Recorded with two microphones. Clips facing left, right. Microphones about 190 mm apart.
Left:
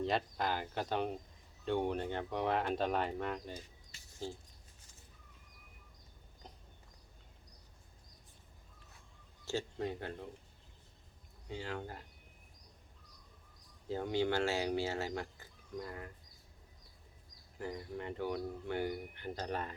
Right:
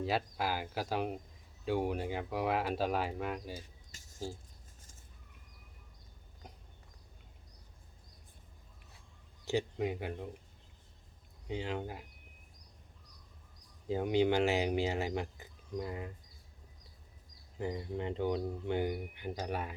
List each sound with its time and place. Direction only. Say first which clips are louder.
0.0 s speech: right 1 dB; 5° right (ahead or behind)
3.9 s a sound: right 1 dB; 45° right (ahead or behind)
9.5 s speech: right 4 dB; 15° right (ahead or behind)
11.4 s speech: right 4 dB; 20° right (ahead or behind)
13.8 s speech: right 5 dB; 15° right (ahead or behind)
17.6 s speech: right 5 dB; 20° right (ahead or behind)